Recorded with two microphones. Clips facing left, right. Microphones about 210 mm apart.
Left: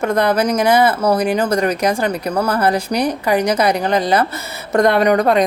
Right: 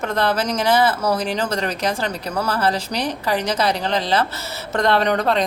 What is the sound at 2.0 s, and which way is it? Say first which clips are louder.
Speech: left 6 dB; 55° left (ahead or behind).